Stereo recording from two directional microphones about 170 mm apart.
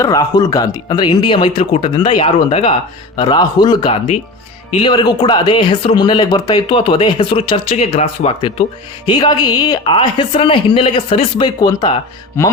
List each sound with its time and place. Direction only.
0.0 s speech: 20° left (ahead or behind)
12.4 s speech: 15° left (ahead or behind)